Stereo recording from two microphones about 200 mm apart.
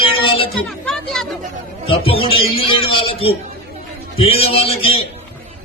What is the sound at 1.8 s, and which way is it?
A man's voice, 30° left (ahead or behind).